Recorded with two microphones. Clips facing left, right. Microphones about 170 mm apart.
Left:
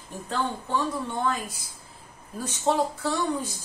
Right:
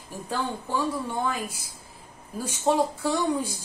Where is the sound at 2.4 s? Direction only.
10° right (ahead or behind).